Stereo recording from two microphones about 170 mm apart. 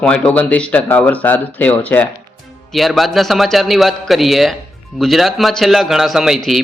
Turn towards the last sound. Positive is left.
turn(degrees=0)  # may be behind; listen again after turning